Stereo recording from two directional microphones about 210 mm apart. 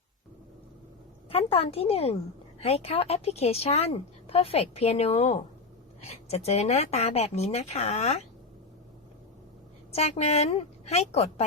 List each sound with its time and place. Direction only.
1.3 s a woman's voice: 25° left (ahead or behind)
9.9 s speech: 30° left (ahead or behind)